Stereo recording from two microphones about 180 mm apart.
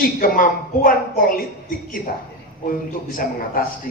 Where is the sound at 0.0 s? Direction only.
50° left (ahead or behind).